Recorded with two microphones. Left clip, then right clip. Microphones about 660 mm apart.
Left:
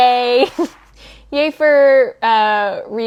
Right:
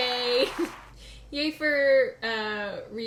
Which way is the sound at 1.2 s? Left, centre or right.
Left.